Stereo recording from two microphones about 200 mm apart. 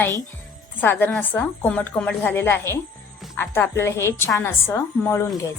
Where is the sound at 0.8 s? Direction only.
10° left (ahead or behind).